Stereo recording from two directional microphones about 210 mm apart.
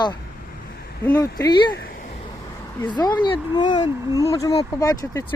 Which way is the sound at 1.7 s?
45° left (ahead or behind).